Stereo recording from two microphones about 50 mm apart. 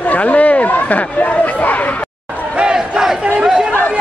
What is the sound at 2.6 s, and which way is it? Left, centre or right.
Crowd, centre.